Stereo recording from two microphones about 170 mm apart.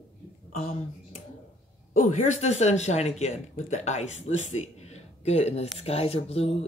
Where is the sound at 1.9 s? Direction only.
45° left (ahead or behind).